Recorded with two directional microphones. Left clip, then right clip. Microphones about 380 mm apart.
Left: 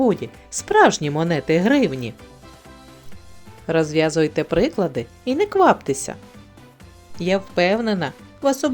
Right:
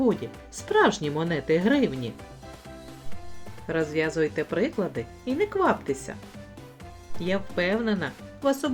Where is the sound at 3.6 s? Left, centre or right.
Left.